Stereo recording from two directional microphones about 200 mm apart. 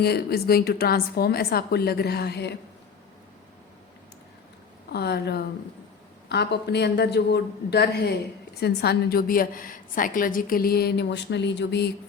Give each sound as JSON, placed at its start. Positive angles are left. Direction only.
{"t": 0.0, "sound": "a woman's voice", "side_deg": 50}
{"t": 4.9, "sound": "a woman's voice", "side_deg": 55}